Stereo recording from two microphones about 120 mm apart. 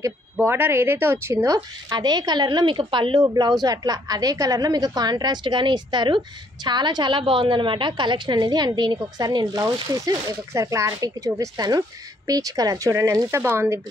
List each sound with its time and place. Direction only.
0.0 s a woman's voice: 20° right (ahead or behind)